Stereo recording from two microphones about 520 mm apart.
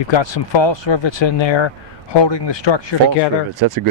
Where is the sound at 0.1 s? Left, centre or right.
Left.